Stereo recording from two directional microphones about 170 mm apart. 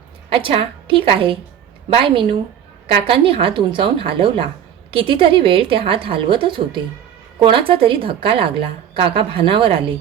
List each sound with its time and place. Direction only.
0.3 s a woman's voice: 30° right (ahead or behind)
2.8 s a woman's voice: 35° right (ahead or behind)